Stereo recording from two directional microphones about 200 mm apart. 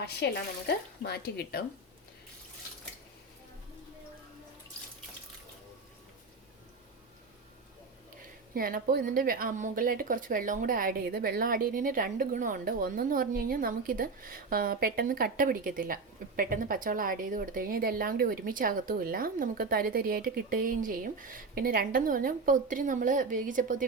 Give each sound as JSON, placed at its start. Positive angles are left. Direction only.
{"t": 0.2, "sound": "speech", "side_deg": 55}
{"t": 8.5, "sound": "a woman's voice", "side_deg": -45}